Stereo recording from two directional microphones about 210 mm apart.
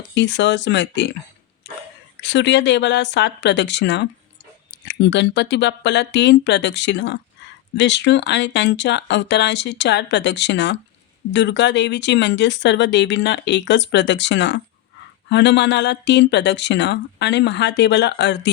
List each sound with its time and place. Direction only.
0.1 s speech: 55° left (ahead or behind)
2.2 s speech: 55° left (ahead or behind)